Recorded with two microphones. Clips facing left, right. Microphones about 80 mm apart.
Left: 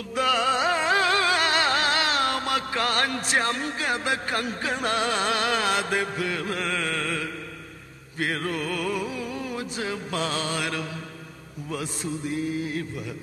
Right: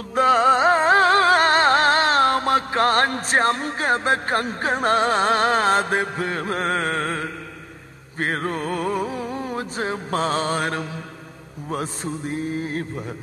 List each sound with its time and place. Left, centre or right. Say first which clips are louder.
0.1 s music: right 7 dB; right